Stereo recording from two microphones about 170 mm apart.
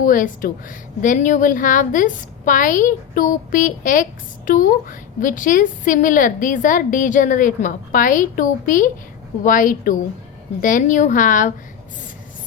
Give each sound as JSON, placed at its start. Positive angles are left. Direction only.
{"t": 0.0, "sound": "a woman's voice", "side_deg": 50}